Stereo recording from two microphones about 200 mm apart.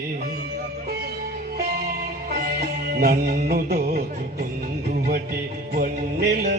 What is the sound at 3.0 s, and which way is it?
Music, 50° right (ahead or behind).